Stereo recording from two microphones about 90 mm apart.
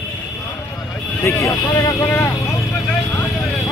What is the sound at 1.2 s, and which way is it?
Speech, 35° left (ahead or behind).